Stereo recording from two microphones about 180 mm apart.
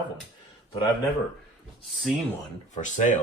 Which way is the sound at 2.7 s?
45° left (ahead or behind).